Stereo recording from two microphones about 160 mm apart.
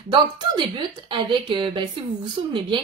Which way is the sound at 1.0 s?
30° right (ahead or behind).